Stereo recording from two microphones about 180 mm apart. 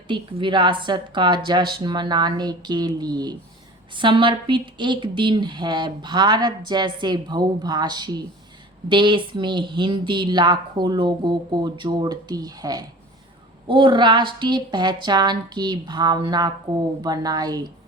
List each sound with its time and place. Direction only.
0.1 s speech: 25° right (ahead or behind)